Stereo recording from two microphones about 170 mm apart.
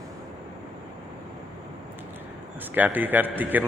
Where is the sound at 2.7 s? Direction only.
10° right (ahead or behind).